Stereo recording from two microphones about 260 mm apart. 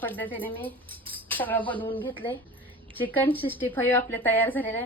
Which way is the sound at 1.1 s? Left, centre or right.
Centre.